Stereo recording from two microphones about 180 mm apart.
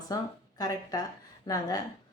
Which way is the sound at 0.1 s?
20° left (ahead or behind).